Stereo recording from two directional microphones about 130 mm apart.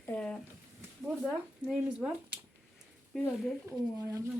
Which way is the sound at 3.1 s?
5° left (ahead or behind).